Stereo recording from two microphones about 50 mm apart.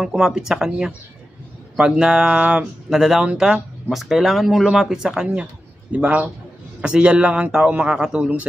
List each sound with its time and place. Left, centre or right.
0.0 s speech: centre
3.5 s speech: centre
5.9 s a man's voice: right